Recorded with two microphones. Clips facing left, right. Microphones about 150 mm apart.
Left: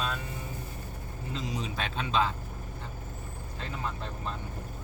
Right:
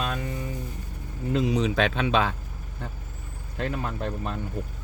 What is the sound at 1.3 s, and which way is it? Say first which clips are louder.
Speech: right 12 dB; 65° right (ahead or behind).